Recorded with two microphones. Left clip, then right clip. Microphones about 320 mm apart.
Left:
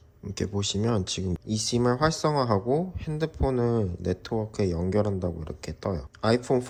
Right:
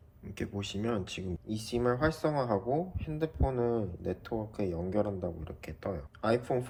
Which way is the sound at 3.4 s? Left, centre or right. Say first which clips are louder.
Left 8 dB; right.